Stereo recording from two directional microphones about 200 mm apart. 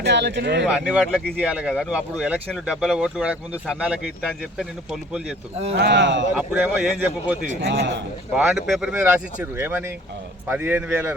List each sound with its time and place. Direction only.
0.0 s speech: 60° right (ahead or behind)
0.6 s speech: 5° right (ahead or behind)
5.7 s speech: 60° right (ahead or behind)
6.3 s speech: 5° right (ahead or behind)
7.6 s speech: 60° right (ahead or behind)
8.3 s speech: 5° right (ahead or behind)